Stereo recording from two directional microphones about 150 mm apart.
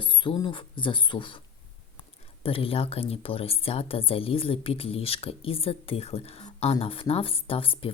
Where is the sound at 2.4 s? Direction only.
40° left (ahead or behind).